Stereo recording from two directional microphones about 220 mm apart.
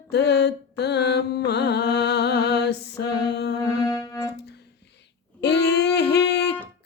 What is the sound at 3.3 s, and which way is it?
Music, 50° left (ahead or behind).